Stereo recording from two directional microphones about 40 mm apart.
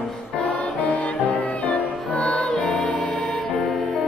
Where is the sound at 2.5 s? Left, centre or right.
Centre.